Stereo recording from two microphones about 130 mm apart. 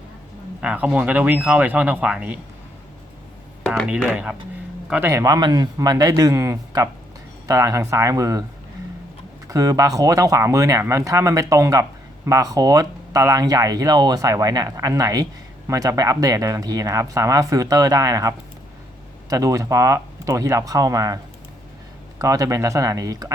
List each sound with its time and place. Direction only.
0.6 s speech: 10° right (ahead or behind)
4.1 s speech: 5° right (ahead or behind)
5.1 s speech: 30° right (ahead or behind)
9.5 s speech: 30° right (ahead or behind)
22.2 s speech: 25° right (ahead or behind)